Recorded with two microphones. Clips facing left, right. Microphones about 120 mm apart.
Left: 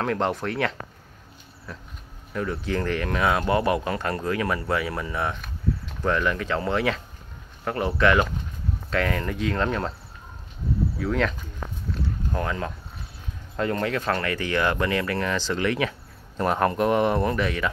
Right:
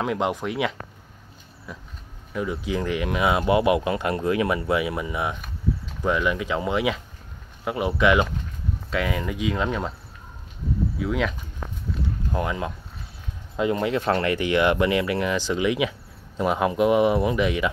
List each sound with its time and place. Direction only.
0.0 s speech: 10° right (ahead or behind)
11.0 s speech: 5° right (ahead or behind)
11.9 s a sound: 15° right (ahead or behind)
13.6 s speech: 15° right (ahead or behind)